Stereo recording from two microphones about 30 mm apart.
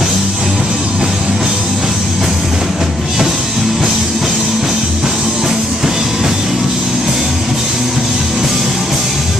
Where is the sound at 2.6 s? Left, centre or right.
Centre.